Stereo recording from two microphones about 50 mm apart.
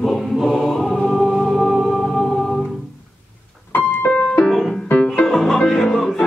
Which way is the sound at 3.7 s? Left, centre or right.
Left.